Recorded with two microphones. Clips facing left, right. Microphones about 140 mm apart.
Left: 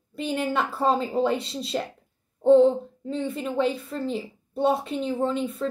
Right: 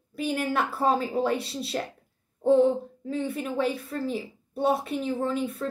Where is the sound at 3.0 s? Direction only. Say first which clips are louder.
Left 1 dB; 5° right (ahead or behind).